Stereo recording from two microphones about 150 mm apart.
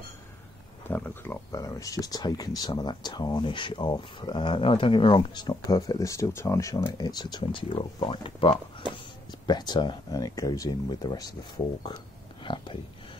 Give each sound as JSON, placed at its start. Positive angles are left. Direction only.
{"t": 0.8, "sound": "speech", "side_deg": 15}